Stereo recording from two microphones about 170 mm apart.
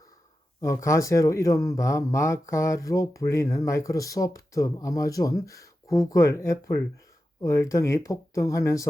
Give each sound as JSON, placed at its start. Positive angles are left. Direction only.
{"t": 0.6, "sound": "speech", "side_deg": 20}